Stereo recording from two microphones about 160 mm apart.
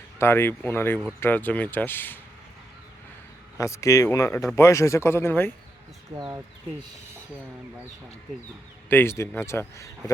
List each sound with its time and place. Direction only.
0.2 s a man's voice: 15° left (ahead or behind)
3.6 s a man's voice: 20° left (ahead or behind)
6.1 s speech: 20° right (ahead or behind)
8.9 s a man's voice: 15° left (ahead or behind)